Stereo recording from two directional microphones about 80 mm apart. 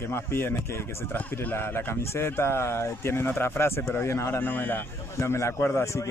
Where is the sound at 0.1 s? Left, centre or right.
Left.